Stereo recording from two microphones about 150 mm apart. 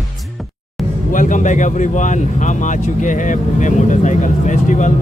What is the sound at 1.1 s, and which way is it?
Speech, 60° left (ahead or behind).